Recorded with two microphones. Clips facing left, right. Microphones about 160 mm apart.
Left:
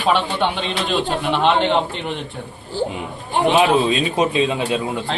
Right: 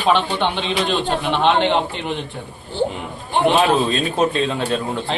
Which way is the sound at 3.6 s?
15° left (ahead or behind).